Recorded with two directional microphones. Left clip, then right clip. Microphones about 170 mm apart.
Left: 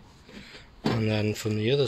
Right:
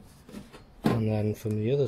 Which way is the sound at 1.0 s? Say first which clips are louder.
Left 2 dB; 5° right (ahead or behind).